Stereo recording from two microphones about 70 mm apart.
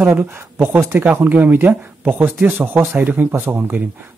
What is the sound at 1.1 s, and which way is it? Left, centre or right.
Speech, right.